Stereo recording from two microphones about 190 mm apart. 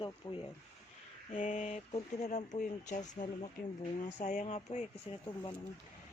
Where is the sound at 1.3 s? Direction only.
45° left (ahead or behind).